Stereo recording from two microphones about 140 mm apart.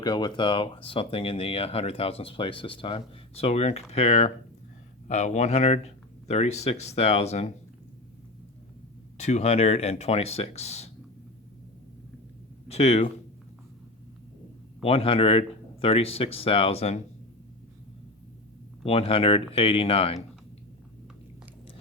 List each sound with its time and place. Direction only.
0.0 s speech: 35° left (ahead or behind); by 7.5 s 50° left (ahead or behind)
9.1 s speech: 50° left (ahead or behind)
12.6 s speech: 50° left (ahead or behind)
14.8 s speech: 45° left (ahead or behind)
18.9 s speech: 45° left (ahead or behind)